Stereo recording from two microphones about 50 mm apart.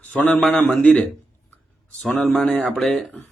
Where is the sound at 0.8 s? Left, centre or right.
Centre.